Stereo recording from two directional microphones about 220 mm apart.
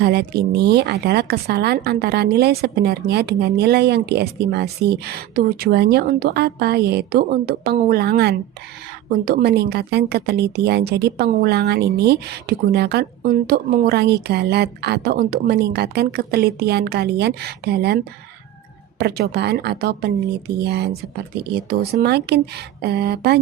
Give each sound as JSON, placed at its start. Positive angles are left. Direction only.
{"t": 0.0, "sound": "speech", "side_deg": -50}